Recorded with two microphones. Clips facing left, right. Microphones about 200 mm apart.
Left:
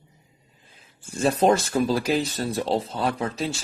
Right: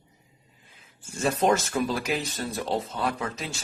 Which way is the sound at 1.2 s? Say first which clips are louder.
Left 4 dB; 30° left (ahead or behind).